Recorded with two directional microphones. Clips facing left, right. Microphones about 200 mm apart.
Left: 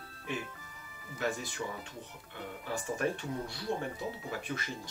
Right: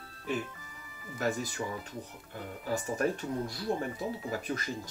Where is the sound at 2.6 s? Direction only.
40° right (ahead or behind).